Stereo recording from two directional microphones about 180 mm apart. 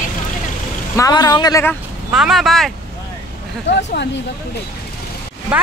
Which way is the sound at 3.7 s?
75° left (ahead or behind).